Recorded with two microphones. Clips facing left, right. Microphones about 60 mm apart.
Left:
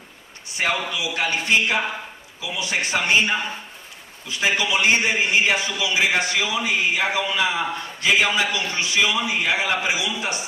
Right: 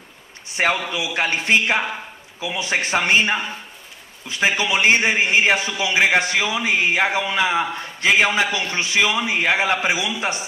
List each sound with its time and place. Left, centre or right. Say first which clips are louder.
0.5 s a man's voice: right 3 dB; right